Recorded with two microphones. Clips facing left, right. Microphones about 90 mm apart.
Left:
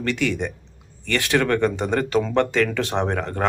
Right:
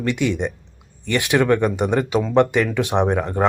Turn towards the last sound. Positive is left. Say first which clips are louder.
# right 4 dB
turn(degrees=-15)  # may be behind; listen again after turning